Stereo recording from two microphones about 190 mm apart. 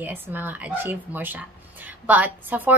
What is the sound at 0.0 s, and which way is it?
A woman's voice, 10° right (ahead or behind).